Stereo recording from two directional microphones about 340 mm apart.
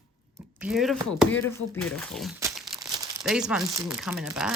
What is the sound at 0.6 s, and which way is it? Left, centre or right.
Speech, centre.